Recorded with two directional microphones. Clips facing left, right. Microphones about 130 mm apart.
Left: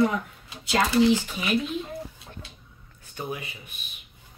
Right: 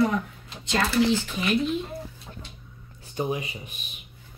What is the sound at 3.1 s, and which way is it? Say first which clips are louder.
Speech: right 6 dB; 15° right (ahead or behind).